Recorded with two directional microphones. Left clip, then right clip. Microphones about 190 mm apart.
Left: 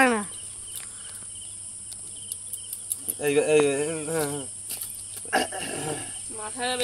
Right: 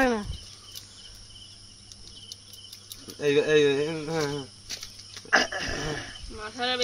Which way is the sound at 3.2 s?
50° right (ahead or behind).